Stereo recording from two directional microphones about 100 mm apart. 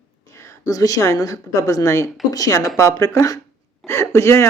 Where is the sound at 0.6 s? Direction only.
35° left (ahead or behind).